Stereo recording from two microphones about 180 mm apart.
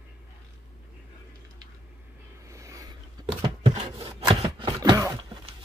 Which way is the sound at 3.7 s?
35° right (ahead or behind).